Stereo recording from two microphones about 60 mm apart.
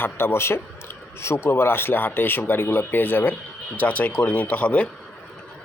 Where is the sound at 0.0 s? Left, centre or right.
Left.